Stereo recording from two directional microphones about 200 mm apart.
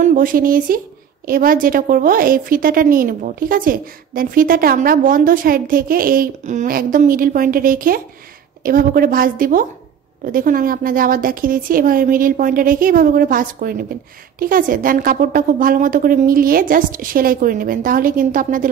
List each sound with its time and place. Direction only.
0.0 s a woman's voice: 45° right (ahead or behind)